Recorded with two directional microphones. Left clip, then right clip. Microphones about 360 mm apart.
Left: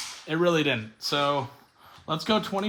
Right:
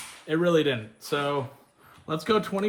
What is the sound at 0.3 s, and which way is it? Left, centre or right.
Speech, centre.